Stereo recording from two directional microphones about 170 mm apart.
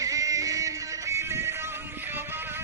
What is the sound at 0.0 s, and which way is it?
Music, 20° right (ahead or behind).